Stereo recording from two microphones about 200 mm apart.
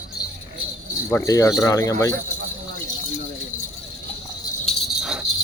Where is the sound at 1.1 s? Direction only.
15° left (ahead or behind).